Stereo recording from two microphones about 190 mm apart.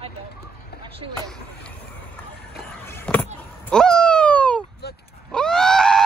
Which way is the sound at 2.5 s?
10° left (ahead or behind).